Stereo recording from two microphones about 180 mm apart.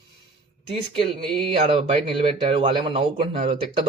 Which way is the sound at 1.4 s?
30° right (ahead or behind).